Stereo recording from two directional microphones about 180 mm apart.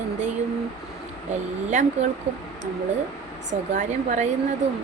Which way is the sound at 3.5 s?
45° right (ahead or behind).